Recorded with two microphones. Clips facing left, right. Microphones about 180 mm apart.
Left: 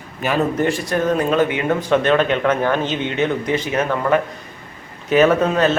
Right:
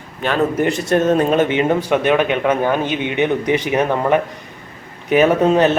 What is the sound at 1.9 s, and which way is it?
A man's voice, 10° right (ahead or behind).